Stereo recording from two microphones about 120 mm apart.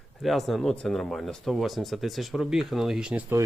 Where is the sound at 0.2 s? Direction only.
Centre (ahead or behind).